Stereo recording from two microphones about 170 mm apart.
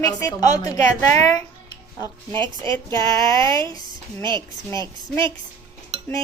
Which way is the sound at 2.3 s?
30° right (ahead or behind).